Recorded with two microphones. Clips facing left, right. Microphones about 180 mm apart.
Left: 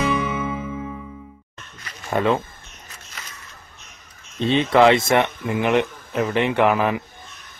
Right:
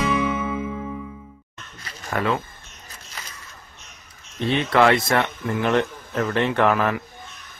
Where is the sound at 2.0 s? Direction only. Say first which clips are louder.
Left 4 dB; 20° left (ahead or behind).